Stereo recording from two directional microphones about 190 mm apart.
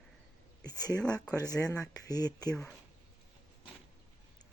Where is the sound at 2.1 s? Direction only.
20° left (ahead or behind).